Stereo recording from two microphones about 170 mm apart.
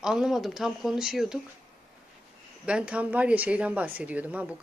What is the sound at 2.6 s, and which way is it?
A woman's voice, 5° right (ahead or behind).